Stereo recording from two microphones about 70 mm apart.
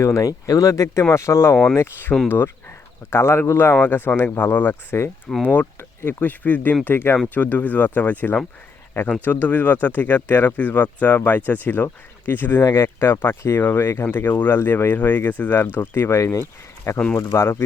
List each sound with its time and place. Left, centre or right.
0.0 s speech: left
5.4 s speech: left
6.8 s speech: left